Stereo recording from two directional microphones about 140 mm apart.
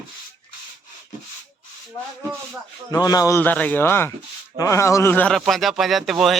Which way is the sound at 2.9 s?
25° left (ahead or behind).